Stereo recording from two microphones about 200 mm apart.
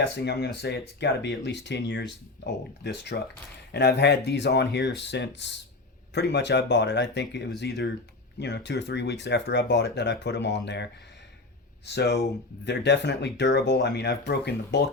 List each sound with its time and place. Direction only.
0.0 s speech: 60° left (ahead or behind)
12.6 s speech: 60° left (ahead or behind)